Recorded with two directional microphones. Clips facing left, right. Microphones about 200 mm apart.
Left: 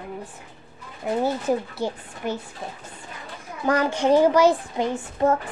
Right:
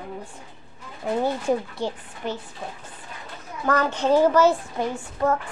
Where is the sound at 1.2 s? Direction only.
5° left (ahead or behind).